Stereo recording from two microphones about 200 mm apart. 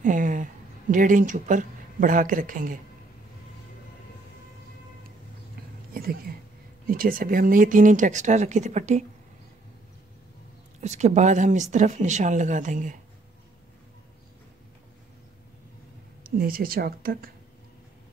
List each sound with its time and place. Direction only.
0.0 s speech: 40° right (ahead or behind)
6.9 s speech: 45° right (ahead or behind)
10.8 s speech: 35° right (ahead or behind)
16.3 s speech: 45° right (ahead or behind)